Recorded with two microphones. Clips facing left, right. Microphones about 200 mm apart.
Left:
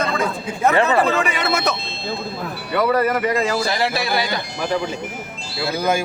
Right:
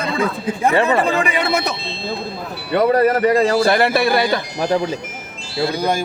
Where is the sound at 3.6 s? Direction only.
55° right (ahead or behind).